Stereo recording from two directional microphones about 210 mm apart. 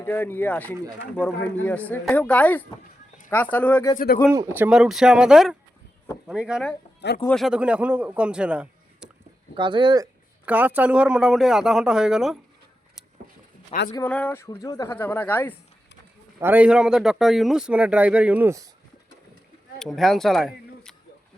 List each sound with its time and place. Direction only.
0.0 s speech: 10° left (ahead or behind)
3.9 s speech: 45° left (ahead or behind)
4.3 s a man's voice: 10° right (ahead or behind)
9.6 s speech: 20° right (ahead or behind)
10.4 s a man's voice: 10° right (ahead or behind)
13.9 s speech: 10° left (ahead or behind)
16.4 s a man's voice: 10° right (ahead or behind)
19.8 s speech: centre (ahead or behind)